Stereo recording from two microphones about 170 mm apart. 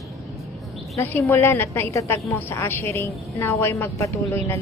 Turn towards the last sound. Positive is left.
turn(degrees=15)  # may be behind; listen again after turning